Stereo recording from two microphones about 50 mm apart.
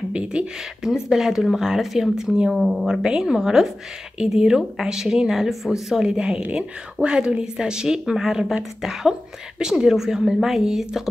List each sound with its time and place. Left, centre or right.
0.1 s a sound: right
0.8 s speech: centre
2.5 s speech: centre
9.6 s speech: centre